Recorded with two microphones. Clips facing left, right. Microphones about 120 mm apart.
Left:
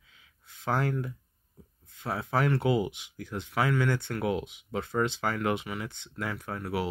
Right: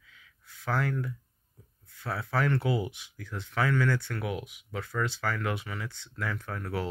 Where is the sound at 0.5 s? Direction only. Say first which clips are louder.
Left 2 dB; 20° left (ahead or behind).